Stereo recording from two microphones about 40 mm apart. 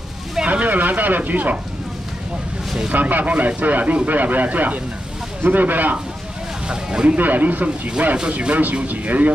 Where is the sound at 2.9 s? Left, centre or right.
Right.